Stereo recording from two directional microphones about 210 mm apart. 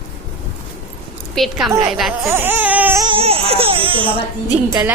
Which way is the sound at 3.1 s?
25° right (ahead or behind).